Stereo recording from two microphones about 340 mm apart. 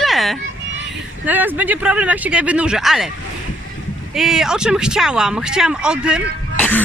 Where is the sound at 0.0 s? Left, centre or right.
Centre.